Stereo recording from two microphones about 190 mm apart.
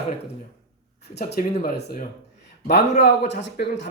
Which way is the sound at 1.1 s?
60° left (ahead or behind).